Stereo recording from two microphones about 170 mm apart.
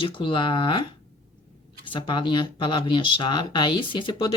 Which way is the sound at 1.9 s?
30° left (ahead or behind).